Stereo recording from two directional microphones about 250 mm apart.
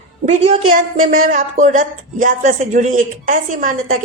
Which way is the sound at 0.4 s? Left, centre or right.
Right.